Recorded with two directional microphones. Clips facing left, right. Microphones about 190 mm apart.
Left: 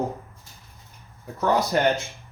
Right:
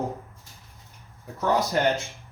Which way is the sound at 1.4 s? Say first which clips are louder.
Left 2 dB; 60° left (ahead or behind).